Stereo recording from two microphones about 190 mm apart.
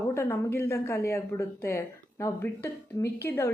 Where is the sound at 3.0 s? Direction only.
15° left (ahead or behind).